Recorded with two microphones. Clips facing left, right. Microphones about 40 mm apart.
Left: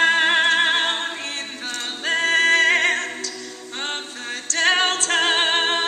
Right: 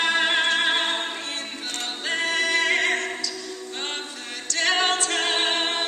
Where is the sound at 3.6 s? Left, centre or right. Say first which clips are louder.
Left 4 dB; left.